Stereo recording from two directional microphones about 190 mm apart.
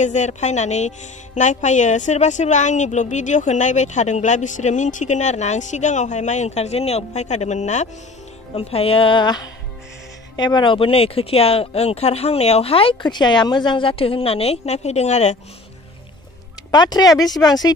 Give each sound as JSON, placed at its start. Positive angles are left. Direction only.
{"t": 0.0, "sound": "speech", "side_deg": 40}
{"t": 16.7, "sound": "speech", "side_deg": 20}